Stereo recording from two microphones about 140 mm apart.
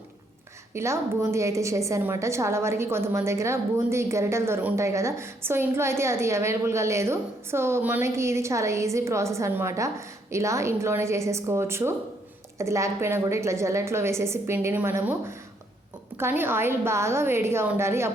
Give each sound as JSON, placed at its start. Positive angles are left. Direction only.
{"t": 0.7, "sound": "a woman's voice", "side_deg": -20}